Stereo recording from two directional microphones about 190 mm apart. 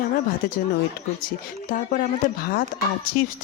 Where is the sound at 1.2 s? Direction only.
45° left (ahead or behind).